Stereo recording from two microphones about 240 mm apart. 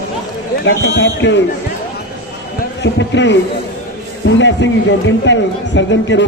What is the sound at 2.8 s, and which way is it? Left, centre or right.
Speech, left.